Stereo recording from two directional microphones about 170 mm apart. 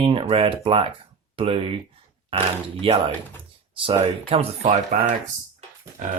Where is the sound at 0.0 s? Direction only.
30° right (ahead or behind).